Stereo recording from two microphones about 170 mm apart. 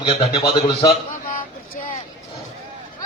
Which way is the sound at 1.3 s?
50° left (ahead or behind).